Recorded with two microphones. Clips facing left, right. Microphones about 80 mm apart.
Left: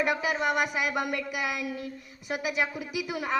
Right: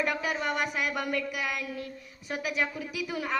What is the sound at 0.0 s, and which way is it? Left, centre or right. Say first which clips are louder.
A woman's voice: left 3 dB; centre.